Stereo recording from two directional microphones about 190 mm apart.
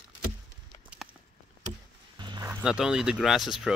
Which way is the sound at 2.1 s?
25° right (ahead or behind).